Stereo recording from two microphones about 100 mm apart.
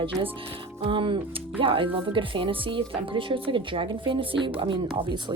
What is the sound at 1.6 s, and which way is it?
Speech, 65° right (ahead or behind).